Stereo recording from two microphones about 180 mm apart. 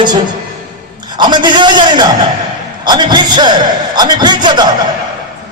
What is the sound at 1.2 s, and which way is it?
A man's voice, 25° right (ahead or behind).